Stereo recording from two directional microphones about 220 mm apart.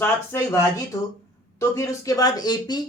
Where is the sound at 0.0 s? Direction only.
10° left (ahead or behind).